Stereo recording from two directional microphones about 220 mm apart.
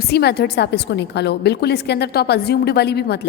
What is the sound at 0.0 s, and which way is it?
A woman's voice, 50° left (ahead or behind).